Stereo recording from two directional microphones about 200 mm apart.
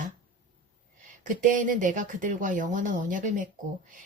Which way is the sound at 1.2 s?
40° right (ahead or behind).